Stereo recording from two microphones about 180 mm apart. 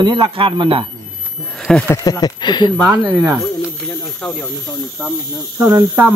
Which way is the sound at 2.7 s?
5° right (ahead or behind).